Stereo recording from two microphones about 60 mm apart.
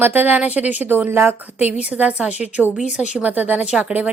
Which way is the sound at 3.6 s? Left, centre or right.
Centre.